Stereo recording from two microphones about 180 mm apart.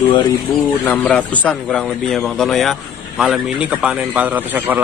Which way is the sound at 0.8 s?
5° left (ahead or behind).